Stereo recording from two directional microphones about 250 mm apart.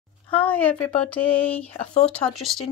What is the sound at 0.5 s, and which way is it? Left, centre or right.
Speech, centre.